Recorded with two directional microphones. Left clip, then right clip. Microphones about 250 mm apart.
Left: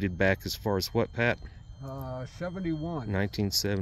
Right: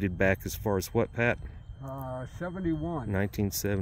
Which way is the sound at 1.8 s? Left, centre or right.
Centre.